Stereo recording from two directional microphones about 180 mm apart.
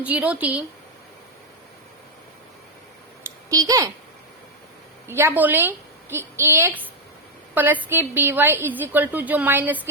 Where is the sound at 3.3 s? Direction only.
20° right (ahead or behind).